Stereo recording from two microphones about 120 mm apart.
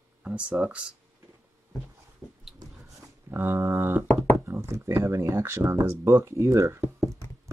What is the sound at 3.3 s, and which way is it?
Speech, 20° right (ahead or behind).